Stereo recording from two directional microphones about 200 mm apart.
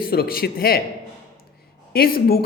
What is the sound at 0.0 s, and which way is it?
Speech, 50° left (ahead or behind).